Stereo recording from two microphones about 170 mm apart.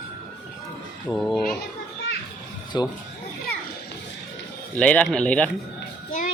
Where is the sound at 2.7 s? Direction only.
25° left (ahead or behind).